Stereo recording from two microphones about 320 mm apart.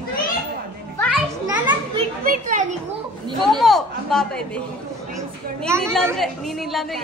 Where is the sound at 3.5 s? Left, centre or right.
Centre.